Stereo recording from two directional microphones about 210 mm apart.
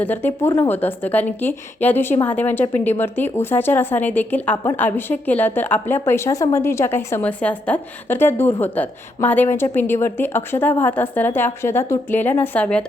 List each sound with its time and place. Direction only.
0.0 s a woman's voice: 10° left (ahead or behind)